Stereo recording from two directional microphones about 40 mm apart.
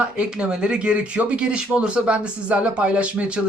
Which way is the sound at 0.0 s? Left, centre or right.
Right.